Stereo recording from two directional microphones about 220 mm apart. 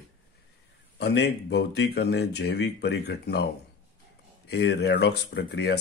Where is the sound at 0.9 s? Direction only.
50° left (ahead or behind).